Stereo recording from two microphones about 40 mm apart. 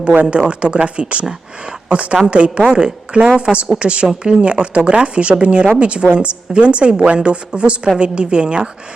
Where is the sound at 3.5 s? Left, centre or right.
Centre.